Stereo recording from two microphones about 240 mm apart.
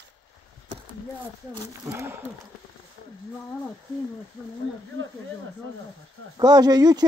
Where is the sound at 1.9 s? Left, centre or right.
Centre.